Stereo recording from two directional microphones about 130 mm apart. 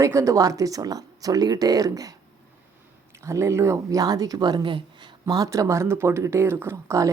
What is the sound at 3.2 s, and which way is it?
A woman's voice, 20° right (ahead or behind).